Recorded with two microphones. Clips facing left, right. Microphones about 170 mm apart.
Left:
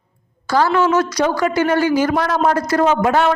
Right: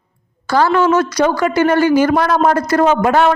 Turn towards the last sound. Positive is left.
turn(degrees=-55)  # may be behind; listen again after turning